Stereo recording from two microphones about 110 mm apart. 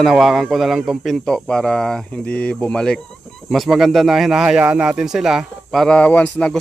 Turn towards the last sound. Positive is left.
turn(degrees=15)  # may be behind; listen again after turning